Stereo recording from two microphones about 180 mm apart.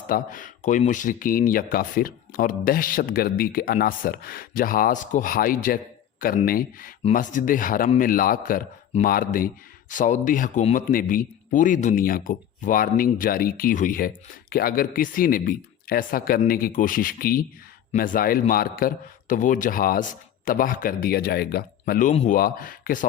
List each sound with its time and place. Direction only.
0.1 s a man's voice: 50° left (ahead or behind)
22.1 s a man's voice: 35° left (ahead or behind)
22.4 s a man's voice: 50° left (ahead or behind)